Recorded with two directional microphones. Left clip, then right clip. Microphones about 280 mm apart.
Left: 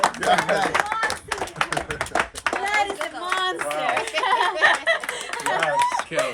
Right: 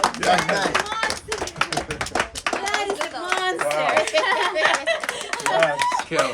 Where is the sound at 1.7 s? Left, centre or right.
Centre.